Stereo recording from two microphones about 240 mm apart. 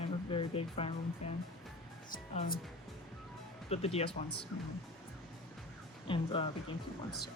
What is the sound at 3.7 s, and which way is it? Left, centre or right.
Speech, left.